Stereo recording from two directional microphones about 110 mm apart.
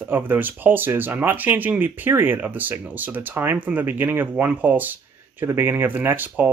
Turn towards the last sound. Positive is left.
turn(degrees=-15)  # may be behind; listen again after turning